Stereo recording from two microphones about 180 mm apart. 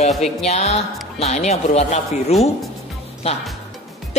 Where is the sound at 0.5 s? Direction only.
35° left (ahead or behind).